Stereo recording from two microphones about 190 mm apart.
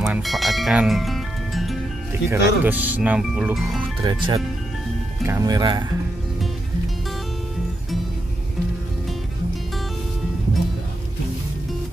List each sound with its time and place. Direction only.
0.0 s speech: centre (ahead or behind)
2.2 s speech: 10° right (ahead or behind)
4.0 s speech: 20° right (ahead or behind)